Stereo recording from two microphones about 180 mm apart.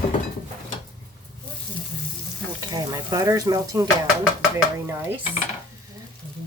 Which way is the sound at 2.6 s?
20° right (ahead or behind).